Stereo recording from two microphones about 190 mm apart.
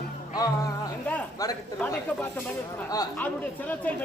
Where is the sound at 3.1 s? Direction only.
10° left (ahead or behind).